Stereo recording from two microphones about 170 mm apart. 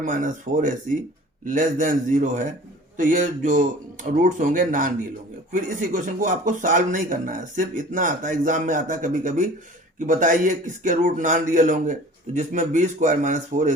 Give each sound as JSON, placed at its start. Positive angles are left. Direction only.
{"t": 0.0, "sound": "speech", "side_deg": -50}